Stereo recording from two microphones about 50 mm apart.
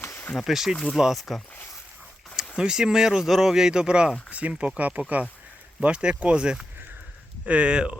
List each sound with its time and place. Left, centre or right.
0.4 s speech: centre
2.6 s speech: centre